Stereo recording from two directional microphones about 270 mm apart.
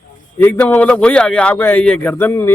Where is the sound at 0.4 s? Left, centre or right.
Centre.